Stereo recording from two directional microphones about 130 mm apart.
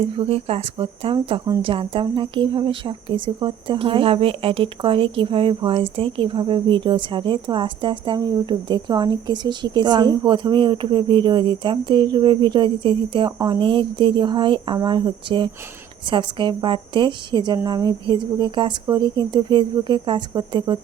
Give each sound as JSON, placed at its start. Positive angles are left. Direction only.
{"t": 0.2, "sound": "speech", "side_deg": -50}